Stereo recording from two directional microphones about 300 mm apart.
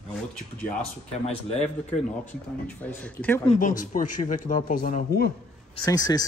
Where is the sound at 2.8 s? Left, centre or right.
Centre.